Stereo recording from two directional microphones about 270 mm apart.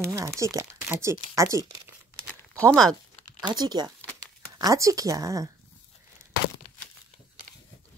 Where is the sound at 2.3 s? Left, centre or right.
Centre.